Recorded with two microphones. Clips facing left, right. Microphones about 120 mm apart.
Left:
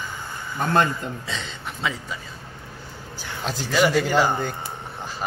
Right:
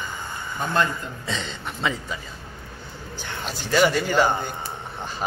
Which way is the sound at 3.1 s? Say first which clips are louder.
Left 3 dB; 5° left (ahead or behind).